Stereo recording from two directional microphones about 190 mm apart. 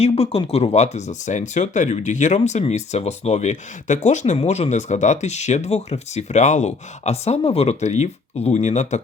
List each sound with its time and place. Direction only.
0.0 s speech: 30° left (ahead or behind)